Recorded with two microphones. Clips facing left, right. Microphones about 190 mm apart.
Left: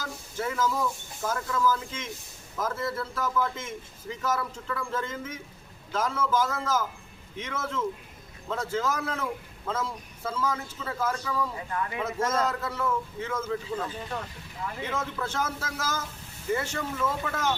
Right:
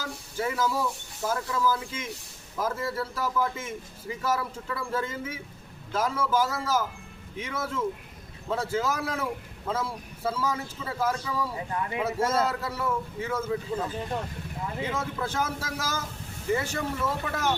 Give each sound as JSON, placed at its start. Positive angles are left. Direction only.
{"t": 0.3, "sound": "a man's voice", "side_deg": -10}
{"t": 11.5, "sound": "speech", "side_deg": -25}
{"t": 12.3, "sound": "a man's voice", "side_deg": -10}